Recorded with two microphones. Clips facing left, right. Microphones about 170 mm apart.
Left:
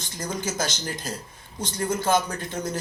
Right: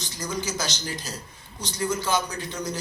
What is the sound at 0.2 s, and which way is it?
Speech, 50° left (ahead or behind).